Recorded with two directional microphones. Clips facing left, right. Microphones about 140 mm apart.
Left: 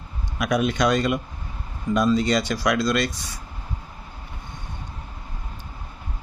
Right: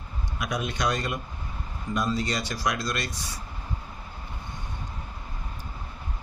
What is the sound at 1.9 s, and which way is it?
Speech, 90° left.